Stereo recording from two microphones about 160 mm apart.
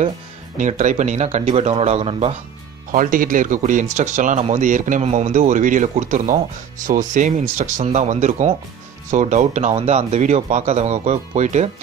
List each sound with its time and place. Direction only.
0.6 s speech: 50° right (ahead or behind)
2.9 s speech: 60° right (ahead or behind)